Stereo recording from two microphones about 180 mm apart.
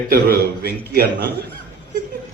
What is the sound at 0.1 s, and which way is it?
A man's voice, 60° right (ahead or behind).